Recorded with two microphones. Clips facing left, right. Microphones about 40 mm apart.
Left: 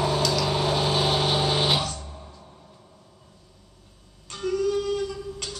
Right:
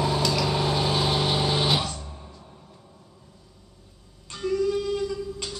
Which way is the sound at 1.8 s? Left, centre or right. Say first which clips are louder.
Left 1 dB; centre.